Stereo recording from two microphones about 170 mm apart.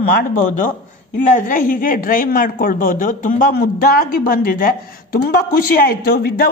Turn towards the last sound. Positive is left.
turn(degrees=65)  # may be behind; listen again after turning